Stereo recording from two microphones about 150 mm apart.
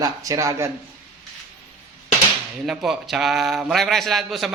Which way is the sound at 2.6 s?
Centre (ahead or behind).